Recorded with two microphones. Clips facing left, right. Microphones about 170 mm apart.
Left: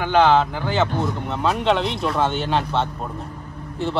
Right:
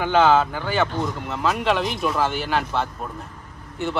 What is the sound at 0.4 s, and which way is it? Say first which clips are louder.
Speech: left 1 dB; 20° left (ahead or behind).